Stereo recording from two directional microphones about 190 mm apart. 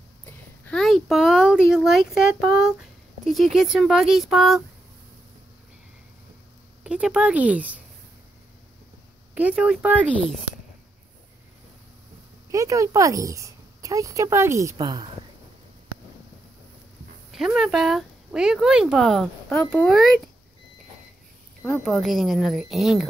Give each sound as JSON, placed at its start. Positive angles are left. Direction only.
{"t": 0.7, "sound": "speech", "side_deg": 0}
{"t": 6.8, "sound": "a woman's voice", "side_deg": -5}
{"t": 9.3, "sound": "a woman's voice", "side_deg": -5}
{"t": 10.1, "sound": "speech", "side_deg": 0}
{"t": 12.4, "sound": "a woman's voice", "side_deg": -15}
{"t": 17.3, "sound": "speech", "side_deg": 0}
{"t": 21.6, "sound": "speech", "side_deg": 0}